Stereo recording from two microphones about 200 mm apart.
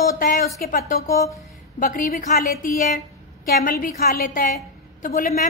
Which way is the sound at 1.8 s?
45° left (ahead or behind).